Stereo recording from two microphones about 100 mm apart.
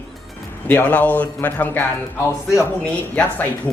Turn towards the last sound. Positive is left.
turn(degrees=15)  # may be behind; listen again after turning